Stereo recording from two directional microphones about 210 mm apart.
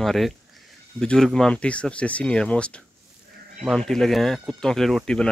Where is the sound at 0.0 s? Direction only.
Centre (ahead or behind).